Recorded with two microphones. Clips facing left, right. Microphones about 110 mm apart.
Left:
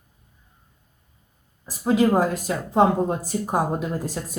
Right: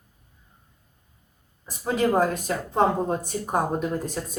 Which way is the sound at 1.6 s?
5° left (ahead or behind).